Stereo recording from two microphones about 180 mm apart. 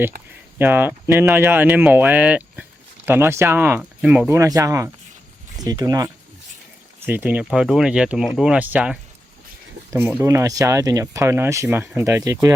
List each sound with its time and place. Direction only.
0.6 s speech: 10° right (ahead or behind)